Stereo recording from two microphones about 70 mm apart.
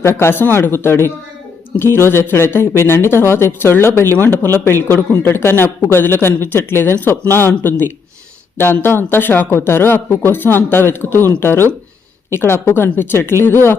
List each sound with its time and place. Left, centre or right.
0.0 s speech: left